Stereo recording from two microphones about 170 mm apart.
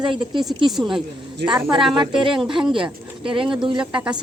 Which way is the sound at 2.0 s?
30° right (ahead or behind).